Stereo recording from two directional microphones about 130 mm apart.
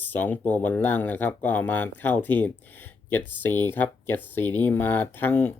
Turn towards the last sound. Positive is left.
turn(degrees=15)  # may be behind; listen again after turning